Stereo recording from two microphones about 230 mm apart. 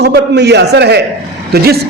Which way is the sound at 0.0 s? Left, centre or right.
Right.